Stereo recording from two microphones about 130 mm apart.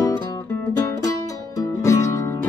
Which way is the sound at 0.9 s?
25° left (ahead or behind).